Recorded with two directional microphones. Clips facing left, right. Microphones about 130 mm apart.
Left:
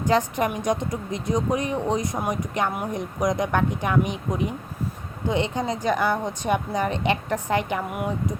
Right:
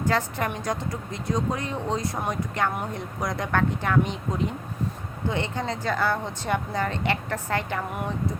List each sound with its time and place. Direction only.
0.0 s a woman's voice: 15° left (ahead or behind)